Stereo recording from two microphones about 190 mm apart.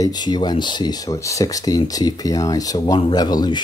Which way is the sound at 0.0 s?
20° left (ahead or behind).